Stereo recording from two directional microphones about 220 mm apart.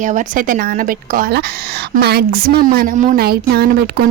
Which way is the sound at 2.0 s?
45° right (ahead or behind).